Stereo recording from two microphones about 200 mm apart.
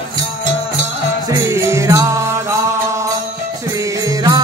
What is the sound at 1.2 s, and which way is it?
Music, 15° right (ahead or behind).